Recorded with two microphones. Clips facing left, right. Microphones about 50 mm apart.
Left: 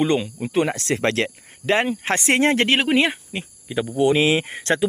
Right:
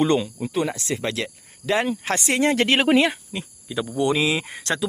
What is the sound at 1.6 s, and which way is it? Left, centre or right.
Speech, left.